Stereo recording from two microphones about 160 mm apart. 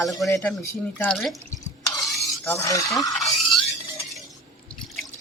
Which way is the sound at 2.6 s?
20° left (ahead or behind).